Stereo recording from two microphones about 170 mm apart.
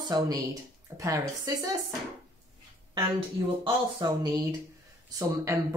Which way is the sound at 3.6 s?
25° right (ahead or behind).